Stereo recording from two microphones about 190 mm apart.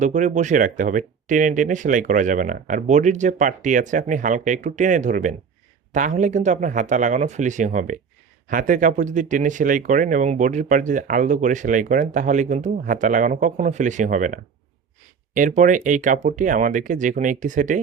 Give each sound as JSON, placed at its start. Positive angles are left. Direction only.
{"t": 0.0, "sound": "speech", "side_deg": -40}
{"t": 15.4, "sound": "speech", "side_deg": -45}